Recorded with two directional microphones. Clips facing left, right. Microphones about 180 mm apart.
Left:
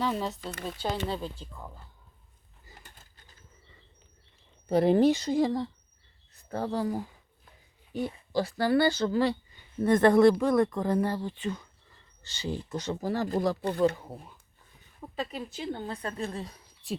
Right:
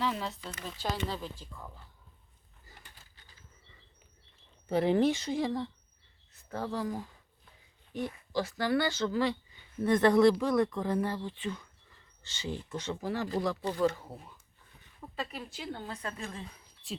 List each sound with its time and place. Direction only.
0.1 s speech: 40° left (ahead or behind)
0.8 s speech: 25° left (ahead or behind)
2.8 s a sound: 45° left (ahead or behind)
4.7 s speech: 35° left (ahead or behind)
8.0 s speech: 30° left (ahead or behind)
9.8 s speech: 50° left (ahead or behind)
13.7 s speech: 60° left (ahead or behind)
13.9 s speech: 15° left (ahead or behind); by 16.6 s 40° left (ahead or behind)